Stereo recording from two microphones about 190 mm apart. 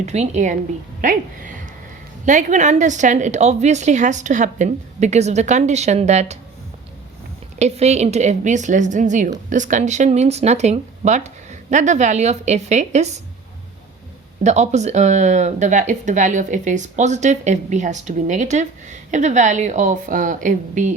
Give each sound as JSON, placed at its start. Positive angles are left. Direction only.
{"t": 0.0, "sound": "speech", "side_deg": -35}
{"t": 7.6, "sound": "speech", "side_deg": -35}
{"t": 14.4, "sound": "speech", "side_deg": -35}